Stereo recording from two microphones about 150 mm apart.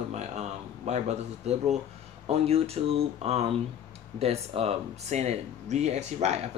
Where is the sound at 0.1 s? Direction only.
50° right (ahead or behind).